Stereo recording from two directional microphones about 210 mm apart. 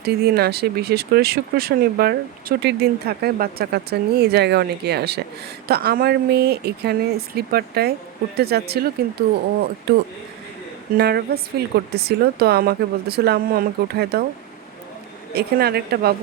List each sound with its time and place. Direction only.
0.0 s speech: 50° right (ahead or behind)
10.9 s speech: 50° right (ahead or behind)
15.4 s speech: 50° right (ahead or behind)